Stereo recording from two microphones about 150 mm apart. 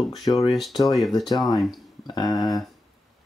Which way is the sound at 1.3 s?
25° left (ahead or behind).